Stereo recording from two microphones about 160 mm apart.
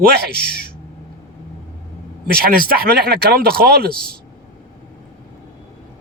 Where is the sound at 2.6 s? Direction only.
75° right (ahead or behind).